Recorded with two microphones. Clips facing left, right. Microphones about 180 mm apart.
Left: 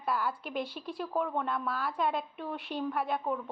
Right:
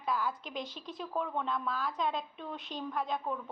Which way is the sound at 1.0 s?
5° left (ahead or behind).